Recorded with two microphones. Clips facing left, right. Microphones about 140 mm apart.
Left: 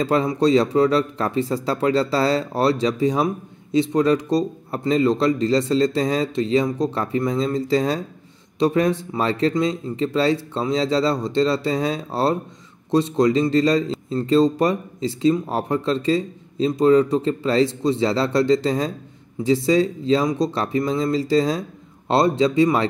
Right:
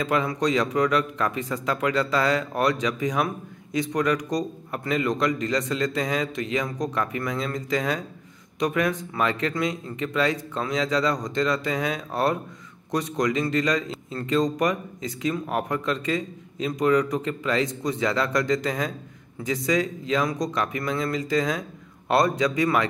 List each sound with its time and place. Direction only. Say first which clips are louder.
0.0 s speech: left 5 dB; 35° left (ahead or behind)